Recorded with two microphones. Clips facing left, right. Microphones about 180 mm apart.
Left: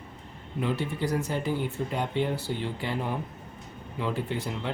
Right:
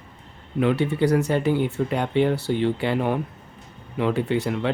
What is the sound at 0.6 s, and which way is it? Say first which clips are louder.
Speech: right 9 dB; 70° right (ahead or behind).